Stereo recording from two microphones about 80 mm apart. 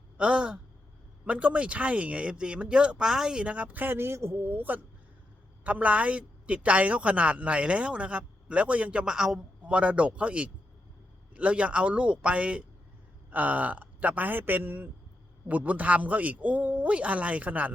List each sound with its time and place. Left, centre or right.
0.2 s a woman's voice: centre